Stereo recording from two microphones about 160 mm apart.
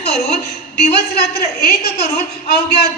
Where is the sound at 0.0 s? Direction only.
85° left.